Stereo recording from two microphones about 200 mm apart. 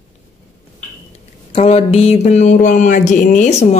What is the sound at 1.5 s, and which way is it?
Speech, 30° left (ahead or behind).